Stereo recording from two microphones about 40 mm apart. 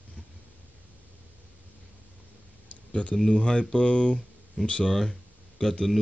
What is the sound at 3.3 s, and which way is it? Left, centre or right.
Speech, left.